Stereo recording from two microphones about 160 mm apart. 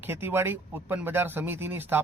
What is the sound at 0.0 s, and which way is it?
Speech, 15° right (ahead or behind).